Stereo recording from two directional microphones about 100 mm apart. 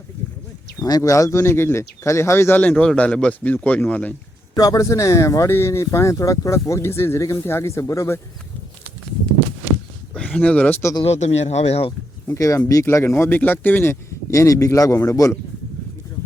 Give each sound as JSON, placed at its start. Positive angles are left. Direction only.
{"t": 0.8, "sound": "speech", "side_deg": 40}
{"t": 2.6, "sound": "a man's voice", "side_deg": 15}
{"t": 4.5, "sound": "speech", "side_deg": 40}
{"t": 10.3, "sound": "a man's voice", "side_deg": 15}
{"t": 11.0, "sound": "speech", "side_deg": 90}
{"t": 12.3, "sound": "speech", "side_deg": 30}